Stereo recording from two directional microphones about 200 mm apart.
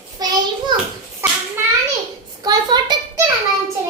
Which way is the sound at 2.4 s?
20° right (ahead or behind).